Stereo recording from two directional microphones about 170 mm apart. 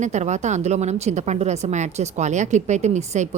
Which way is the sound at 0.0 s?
45° right (ahead or behind).